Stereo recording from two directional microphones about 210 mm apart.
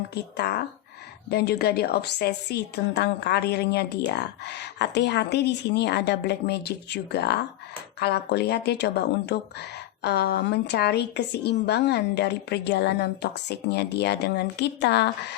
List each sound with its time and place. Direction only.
0.1 s a woman's voice: 50° left (ahead or behind)